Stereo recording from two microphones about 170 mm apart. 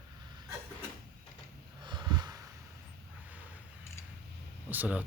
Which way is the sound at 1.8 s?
25° right (ahead or behind).